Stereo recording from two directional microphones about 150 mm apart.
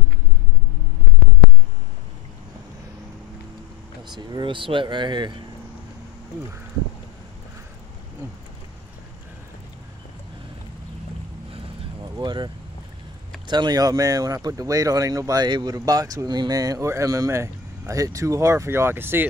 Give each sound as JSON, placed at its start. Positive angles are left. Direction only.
{"t": 4.2, "sound": "speech", "side_deg": -30}
{"t": 8.2, "sound": "a sound", "side_deg": -15}
{"t": 11.5, "sound": "vehicle", "side_deg": -30}
{"t": 13.5, "sound": "speech", "side_deg": -30}